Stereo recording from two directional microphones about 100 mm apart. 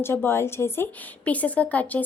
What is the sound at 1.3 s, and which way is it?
Speech, 15° left (ahead or behind).